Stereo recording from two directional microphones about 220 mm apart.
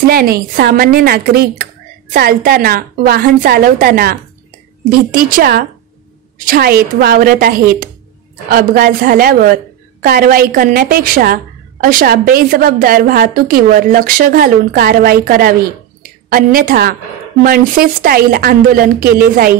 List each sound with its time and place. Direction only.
0.0 s a woman's voice: 40° right (ahead or behind)